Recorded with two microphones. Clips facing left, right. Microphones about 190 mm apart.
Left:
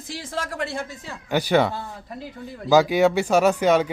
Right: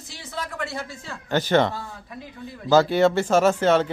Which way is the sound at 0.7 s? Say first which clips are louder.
Left 2 dB; 20° left (ahead or behind).